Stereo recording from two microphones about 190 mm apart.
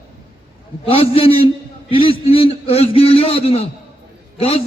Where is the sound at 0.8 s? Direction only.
30° left (ahead or behind).